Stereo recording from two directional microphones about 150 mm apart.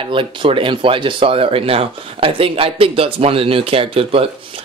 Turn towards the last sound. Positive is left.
turn(degrees=-40)  # may be behind; listen again after turning